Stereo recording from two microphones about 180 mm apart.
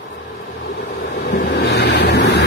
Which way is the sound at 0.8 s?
70° left (ahead or behind).